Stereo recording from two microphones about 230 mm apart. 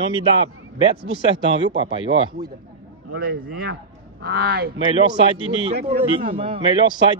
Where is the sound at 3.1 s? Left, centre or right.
Right.